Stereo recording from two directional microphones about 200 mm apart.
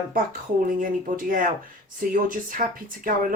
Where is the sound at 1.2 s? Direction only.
45° right (ahead or behind).